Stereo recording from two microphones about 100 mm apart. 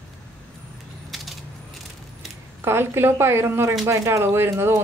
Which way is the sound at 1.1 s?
Centre (ahead or behind).